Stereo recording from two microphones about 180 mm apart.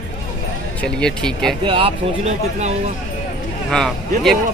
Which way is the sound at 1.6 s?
30° right (ahead or behind).